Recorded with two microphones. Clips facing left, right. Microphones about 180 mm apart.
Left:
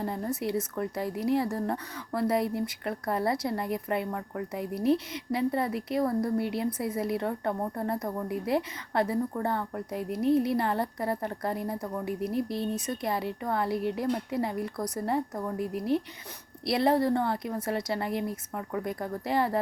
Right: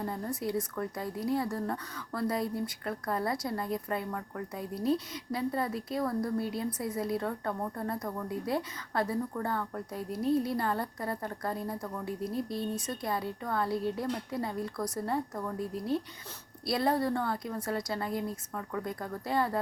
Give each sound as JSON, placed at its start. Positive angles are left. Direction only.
{"t": 0.0, "sound": "speech", "side_deg": 20}
{"t": 6.4, "sound": "a woman's voice", "side_deg": 70}
{"t": 6.7, "sound": "speech", "side_deg": 25}
{"t": 10.0, "sound": "a woman's voice", "side_deg": 65}
{"t": 10.4, "sound": "speech", "side_deg": 20}
{"t": 12.0, "sound": "a woman's voice", "side_deg": 65}
{"t": 12.5, "sound": "speech", "side_deg": 25}
{"t": 16.6, "sound": "speech", "side_deg": 25}